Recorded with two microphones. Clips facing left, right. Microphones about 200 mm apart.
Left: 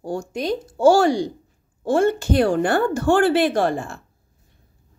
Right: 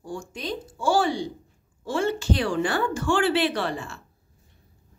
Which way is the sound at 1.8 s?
55° left (ahead or behind).